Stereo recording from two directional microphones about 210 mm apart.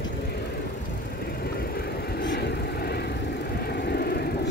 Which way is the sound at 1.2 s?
50° left (ahead or behind).